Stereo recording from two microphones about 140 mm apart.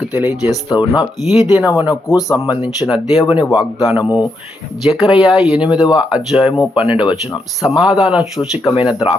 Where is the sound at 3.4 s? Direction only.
25° left (ahead or behind).